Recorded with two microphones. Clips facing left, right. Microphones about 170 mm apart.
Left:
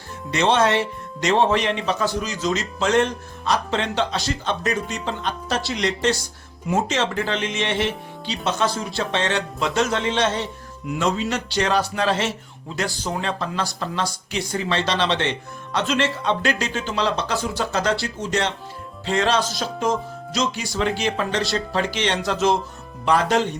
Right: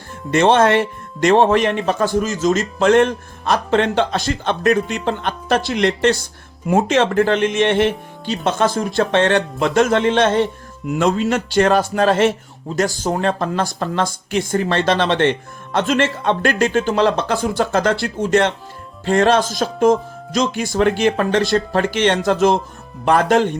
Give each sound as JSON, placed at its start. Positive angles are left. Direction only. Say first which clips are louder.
{"t": 0.3, "sound": "a man's voice", "louder": "right 5 dB", "side_deg": -50}